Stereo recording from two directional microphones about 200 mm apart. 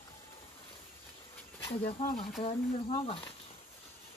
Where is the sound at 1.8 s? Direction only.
45° left (ahead or behind).